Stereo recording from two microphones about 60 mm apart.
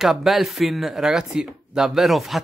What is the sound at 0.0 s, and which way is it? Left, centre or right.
Speech, centre.